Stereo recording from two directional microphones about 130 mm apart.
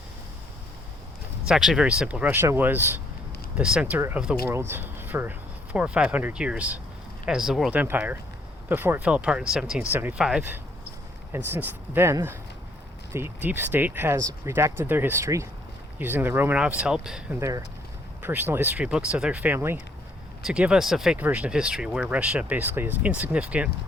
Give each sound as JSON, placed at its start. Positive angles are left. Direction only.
{"t": 1.5, "sound": "speech", "side_deg": -5}
{"t": 2.3, "sound": "speech", "side_deg": -20}
{"t": 10.2, "sound": "speech", "side_deg": -5}
{"t": 11.3, "sound": "speech", "side_deg": -15}